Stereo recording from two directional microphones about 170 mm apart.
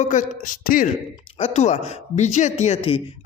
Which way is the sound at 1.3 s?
40° left (ahead or behind).